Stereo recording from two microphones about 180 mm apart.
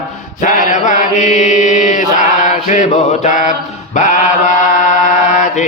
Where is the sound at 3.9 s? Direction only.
45° left (ahead or behind).